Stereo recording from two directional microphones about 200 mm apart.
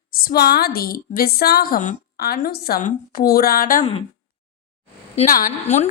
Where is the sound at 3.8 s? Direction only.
30° left (ahead or behind).